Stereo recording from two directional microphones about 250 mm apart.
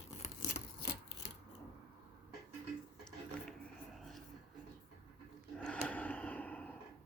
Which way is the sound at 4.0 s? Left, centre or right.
Centre.